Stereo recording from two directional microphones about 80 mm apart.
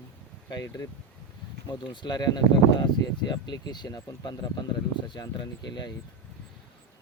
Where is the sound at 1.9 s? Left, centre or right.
Left.